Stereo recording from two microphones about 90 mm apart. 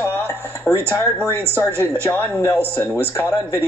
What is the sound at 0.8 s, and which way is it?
Speech, 30° right (ahead or behind).